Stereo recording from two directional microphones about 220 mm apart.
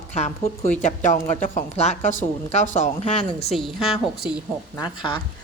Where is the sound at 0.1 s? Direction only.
30° left (ahead or behind).